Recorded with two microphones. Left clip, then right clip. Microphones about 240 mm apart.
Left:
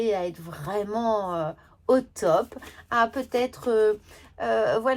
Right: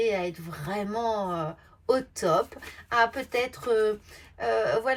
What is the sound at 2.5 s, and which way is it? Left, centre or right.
Speech, centre.